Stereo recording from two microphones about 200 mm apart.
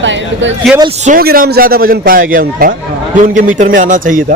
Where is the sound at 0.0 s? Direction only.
65° right (ahead or behind).